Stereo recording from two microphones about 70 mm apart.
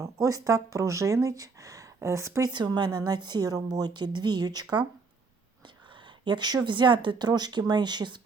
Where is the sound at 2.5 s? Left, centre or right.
Right.